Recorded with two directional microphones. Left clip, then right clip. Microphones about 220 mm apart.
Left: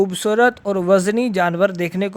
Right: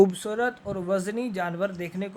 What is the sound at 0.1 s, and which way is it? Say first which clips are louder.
Speech: left 12 dB; 40° left (ahead or behind).